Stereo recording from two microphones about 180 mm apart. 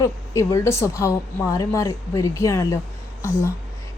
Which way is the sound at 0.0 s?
15° left (ahead or behind).